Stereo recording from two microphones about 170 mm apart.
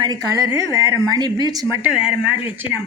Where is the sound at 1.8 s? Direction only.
5° right (ahead or behind).